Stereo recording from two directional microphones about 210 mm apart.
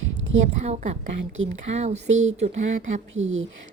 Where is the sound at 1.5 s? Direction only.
30° right (ahead or behind).